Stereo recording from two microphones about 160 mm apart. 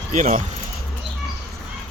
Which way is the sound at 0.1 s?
50° right (ahead or behind).